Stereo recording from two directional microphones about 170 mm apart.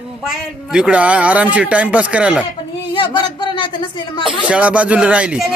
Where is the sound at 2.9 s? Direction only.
30° left (ahead or behind).